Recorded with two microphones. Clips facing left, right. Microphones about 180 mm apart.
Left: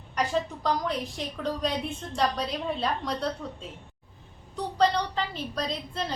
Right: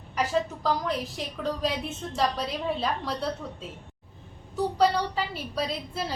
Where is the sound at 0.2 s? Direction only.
5° right (ahead or behind).